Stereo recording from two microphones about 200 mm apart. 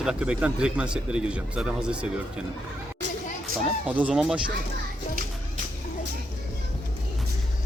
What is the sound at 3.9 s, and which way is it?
Speech, 5° right (ahead or behind).